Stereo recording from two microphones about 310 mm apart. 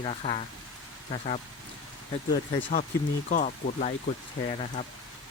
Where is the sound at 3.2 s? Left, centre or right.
Left.